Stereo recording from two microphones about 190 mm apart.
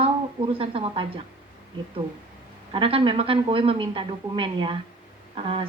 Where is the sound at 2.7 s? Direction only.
30° right (ahead or behind).